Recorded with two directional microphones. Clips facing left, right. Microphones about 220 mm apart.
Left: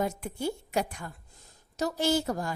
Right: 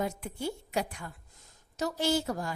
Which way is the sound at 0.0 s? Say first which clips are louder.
Left 3 dB; 45° left (ahead or behind).